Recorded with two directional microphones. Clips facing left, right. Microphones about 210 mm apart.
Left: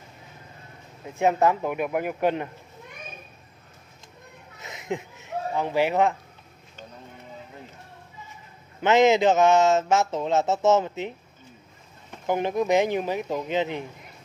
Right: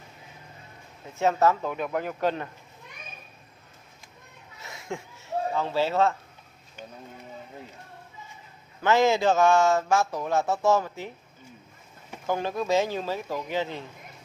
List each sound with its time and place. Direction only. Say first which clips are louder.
1.1 s speech: left 1 dB; 15° left (ahead or behind)
4.6 s fowl: left 5 dB; 20° left (ahead or behind)
8.8 s speech: left 3 dB; 20° left (ahead or behind)
12.3 s speech: left 3 dB; 20° left (ahead or behind)